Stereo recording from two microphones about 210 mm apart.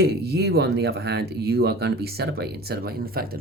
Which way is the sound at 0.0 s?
50° right (ahead or behind).